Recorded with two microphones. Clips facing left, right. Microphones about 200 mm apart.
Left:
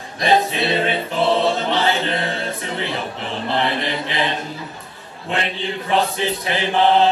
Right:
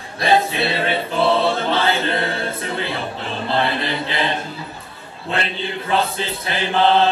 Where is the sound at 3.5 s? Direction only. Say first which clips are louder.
Right 1 dB; 20° left (ahead or behind).